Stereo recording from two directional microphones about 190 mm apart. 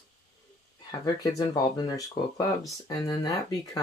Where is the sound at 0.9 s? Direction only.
20° left (ahead or behind).